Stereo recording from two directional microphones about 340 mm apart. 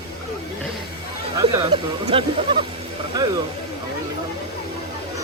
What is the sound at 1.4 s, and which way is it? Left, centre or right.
Speech, centre.